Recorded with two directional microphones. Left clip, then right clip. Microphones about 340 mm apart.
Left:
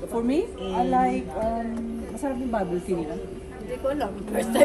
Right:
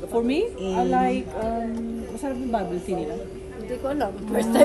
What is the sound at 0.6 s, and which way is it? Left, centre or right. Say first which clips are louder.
Speech: right 1 dB; centre.